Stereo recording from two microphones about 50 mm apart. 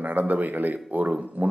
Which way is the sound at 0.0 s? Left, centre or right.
Right.